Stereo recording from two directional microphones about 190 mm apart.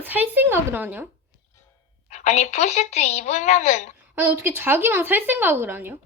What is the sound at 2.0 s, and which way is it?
Speech, 35° left (ahead or behind).